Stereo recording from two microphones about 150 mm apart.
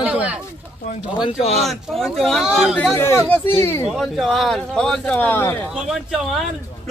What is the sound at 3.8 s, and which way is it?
Speech, centre (ahead or behind).